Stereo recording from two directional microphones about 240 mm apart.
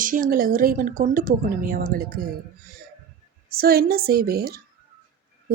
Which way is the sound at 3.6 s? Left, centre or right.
Right.